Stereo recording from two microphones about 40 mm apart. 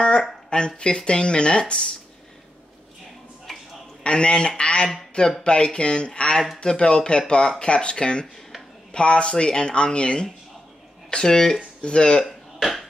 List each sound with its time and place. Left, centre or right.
0.0 s speech: left
3.5 s a sound: centre
4.0 s speech: left
12.3 s burping: centre